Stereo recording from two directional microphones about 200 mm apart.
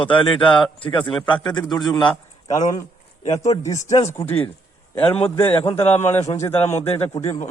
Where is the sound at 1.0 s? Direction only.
5° left (ahead or behind).